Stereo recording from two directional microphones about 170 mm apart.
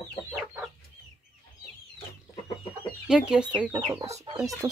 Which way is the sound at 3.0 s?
5° right (ahead or behind).